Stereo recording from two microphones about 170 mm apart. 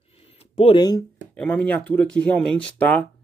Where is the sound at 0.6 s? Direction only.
30° left (ahead or behind).